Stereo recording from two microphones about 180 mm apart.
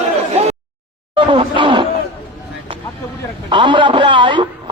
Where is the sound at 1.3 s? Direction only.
30° right (ahead or behind).